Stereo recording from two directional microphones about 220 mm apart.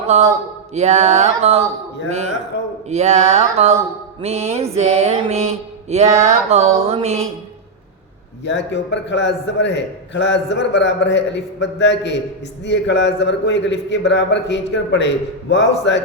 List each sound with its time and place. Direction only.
0.1 s mantra: 30° right (ahead or behind)
2.9 s mantra: 30° right (ahead or behind)
8.4 s a man's voice: 55° left (ahead or behind)